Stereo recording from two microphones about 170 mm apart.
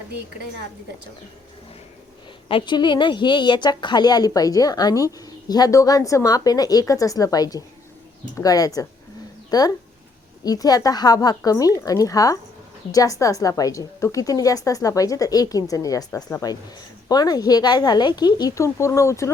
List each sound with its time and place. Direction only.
2.5 s a woman's voice: 30° left (ahead or behind)